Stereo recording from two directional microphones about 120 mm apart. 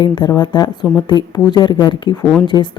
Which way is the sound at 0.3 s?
35° left (ahead or behind).